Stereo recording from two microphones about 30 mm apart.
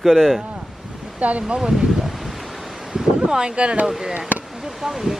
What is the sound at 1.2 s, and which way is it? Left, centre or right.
Speech, right.